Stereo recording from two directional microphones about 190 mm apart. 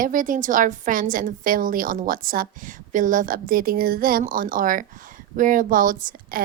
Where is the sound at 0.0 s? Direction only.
45° right (ahead or behind).